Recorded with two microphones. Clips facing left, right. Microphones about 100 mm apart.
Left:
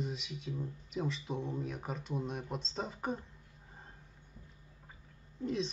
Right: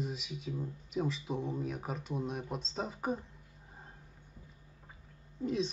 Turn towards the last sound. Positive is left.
turn(degrees=0)  # may be behind; listen again after turning